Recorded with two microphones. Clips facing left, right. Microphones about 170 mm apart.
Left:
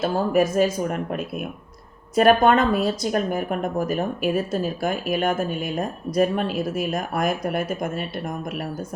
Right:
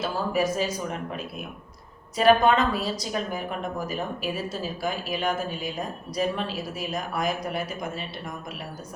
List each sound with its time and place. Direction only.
0.0 s a woman's voice: 50° left (ahead or behind)